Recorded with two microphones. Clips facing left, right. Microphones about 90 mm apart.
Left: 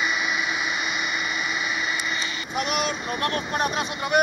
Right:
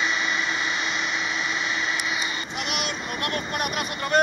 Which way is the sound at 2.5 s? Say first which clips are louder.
Left 4 dB; 40° left (ahead or behind).